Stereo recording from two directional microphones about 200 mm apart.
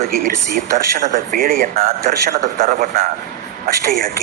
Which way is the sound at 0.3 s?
50° right (ahead or behind).